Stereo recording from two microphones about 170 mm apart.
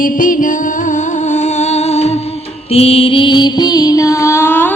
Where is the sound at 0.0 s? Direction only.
55° left (ahead or behind).